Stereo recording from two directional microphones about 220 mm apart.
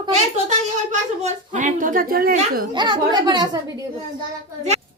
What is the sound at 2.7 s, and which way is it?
A woman's voice, 20° right (ahead or behind).